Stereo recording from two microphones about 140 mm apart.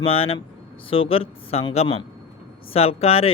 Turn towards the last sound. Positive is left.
turn(degrees=45)  # may be behind; listen again after turning